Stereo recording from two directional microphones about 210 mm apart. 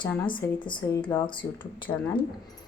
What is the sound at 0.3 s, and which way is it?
A woman's voice, 20° left (ahead or behind).